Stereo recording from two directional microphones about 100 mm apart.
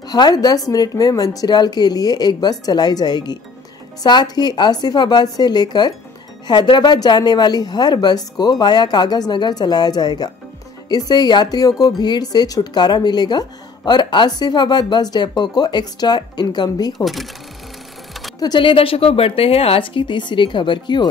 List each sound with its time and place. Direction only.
0.0 s speech: 40° left (ahead or behind)
17.0 s speech: centre (ahead or behind)
18.4 s a woman's voice: 50° left (ahead or behind)